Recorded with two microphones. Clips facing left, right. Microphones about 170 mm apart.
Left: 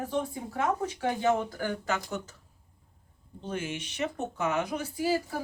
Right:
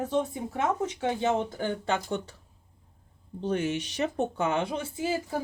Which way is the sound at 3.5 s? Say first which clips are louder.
Right 6 dB; 35° right (ahead or behind).